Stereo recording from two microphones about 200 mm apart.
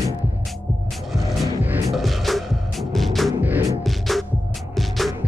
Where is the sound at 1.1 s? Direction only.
Centre (ahead or behind).